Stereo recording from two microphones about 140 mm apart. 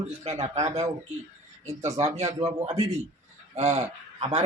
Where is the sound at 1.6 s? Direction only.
50° right (ahead or behind).